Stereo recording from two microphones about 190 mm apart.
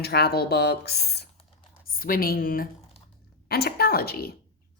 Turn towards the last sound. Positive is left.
turn(degrees=55)  # may be behind; listen again after turning